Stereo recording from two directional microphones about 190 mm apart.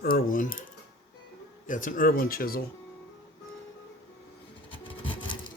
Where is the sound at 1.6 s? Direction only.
45° left (ahead or behind).